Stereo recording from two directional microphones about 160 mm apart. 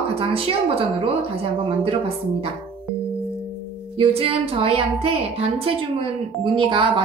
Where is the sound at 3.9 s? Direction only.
35° right (ahead or behind).